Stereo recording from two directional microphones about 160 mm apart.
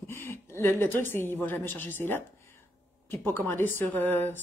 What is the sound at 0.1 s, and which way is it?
A woman's voice, 15° left (ahead or behind).